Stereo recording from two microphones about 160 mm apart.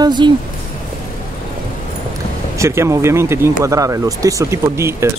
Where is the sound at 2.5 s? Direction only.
15° right (ahead or behind).